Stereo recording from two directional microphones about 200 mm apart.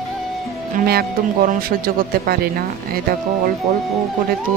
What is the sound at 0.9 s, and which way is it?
A man's voice, 50° right (ahead or behind).